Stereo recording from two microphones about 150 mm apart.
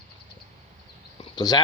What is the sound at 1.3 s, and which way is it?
Speech, 25° left (ahead or behind).